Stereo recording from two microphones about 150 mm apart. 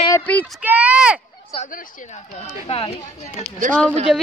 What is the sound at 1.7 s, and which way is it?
Speech, 70° left (ahead or behind).